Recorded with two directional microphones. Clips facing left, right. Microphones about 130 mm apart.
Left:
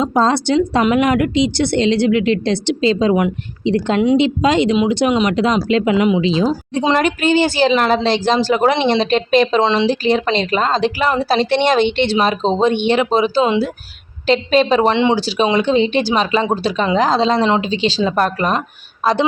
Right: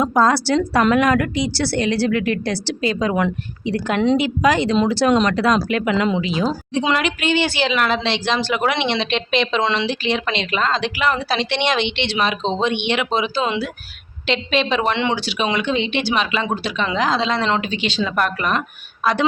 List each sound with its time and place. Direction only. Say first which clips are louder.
0.0 s a woman's voice: left 1 dB; 25° left (ahead or behind)
6.8 s speech: left 6 dB; 40° left (ahead or behind)